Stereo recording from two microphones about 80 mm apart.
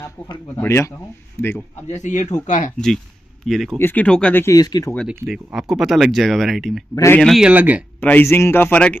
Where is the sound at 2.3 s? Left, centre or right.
Centre.